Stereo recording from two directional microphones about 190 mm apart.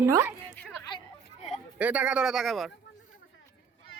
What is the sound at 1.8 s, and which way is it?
Speech, 5° right (ahead or behind).